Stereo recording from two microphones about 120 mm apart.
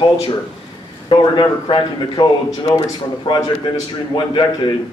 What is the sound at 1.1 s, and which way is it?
A man's voice, 40° left (ahead or behind).